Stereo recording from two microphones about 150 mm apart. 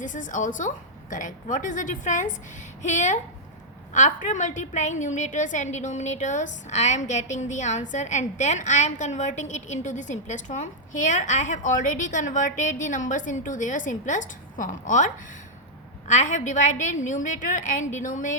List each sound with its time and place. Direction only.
0.0 s a woman's voice: 60° left (ahead or behind)